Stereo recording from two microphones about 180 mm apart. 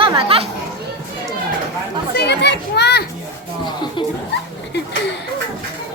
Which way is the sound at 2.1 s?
70° left (ahead or behind).